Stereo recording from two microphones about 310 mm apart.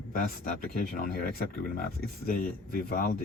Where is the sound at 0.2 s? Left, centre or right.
Left.